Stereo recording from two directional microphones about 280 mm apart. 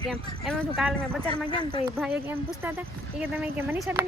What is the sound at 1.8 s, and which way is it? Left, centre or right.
Speech, centre.